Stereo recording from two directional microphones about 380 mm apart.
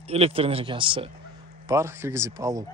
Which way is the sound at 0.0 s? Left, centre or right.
Centre.